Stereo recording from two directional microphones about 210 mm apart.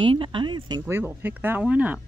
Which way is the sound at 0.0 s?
25° right (ahead or behind).